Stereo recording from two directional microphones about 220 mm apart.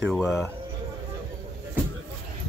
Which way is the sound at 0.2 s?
10° left (ahead or behind).